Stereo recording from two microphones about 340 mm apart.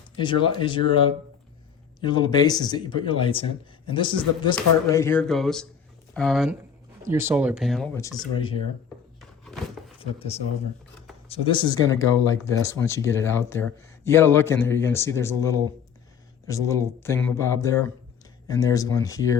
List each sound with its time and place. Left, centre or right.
0.2 s speech: centre
2.0 s speech: centre
10.0 s speech: centre